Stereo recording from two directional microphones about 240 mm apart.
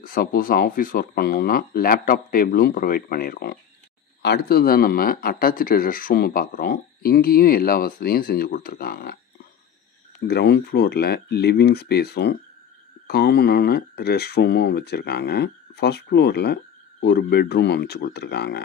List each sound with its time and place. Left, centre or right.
0.0 s speech: left
10.2 s speech: left